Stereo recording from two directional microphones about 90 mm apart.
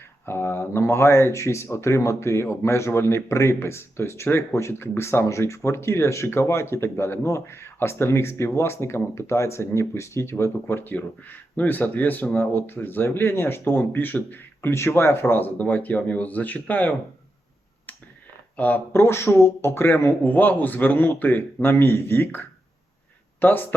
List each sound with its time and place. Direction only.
0.3 s speech: 25° left (ahead or behind)
18.5 s speech: 20° left (ahead or behind)